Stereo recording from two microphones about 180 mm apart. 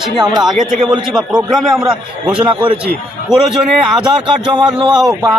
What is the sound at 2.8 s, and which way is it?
Speech, 5° right (ahead or behind).